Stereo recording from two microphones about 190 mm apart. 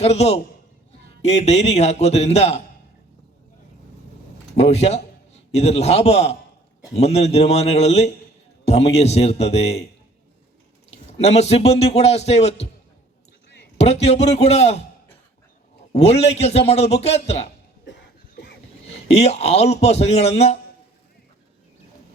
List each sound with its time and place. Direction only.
0.0 s a man's voice: 35° left (ahead or behind)
4.5 s a man's voice: 35° left (ahead or behind)
10.9 s a man's voice: 35° left (ahead or behind)
13.7 s a man's voice: 35° left (ahead or behind)
15.9 s a man's voice: 35° left (ahead or behind)
19.0 s a man's voice: 35° left (ahead or behind)